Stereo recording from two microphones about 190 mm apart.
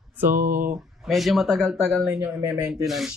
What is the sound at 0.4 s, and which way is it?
Speech, 45° right (ahead or behind).